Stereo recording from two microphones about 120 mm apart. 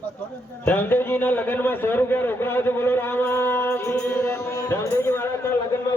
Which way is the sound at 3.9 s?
10° left (ahead or behind).